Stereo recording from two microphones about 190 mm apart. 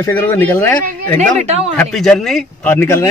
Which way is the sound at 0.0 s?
15° left (ahead or behind).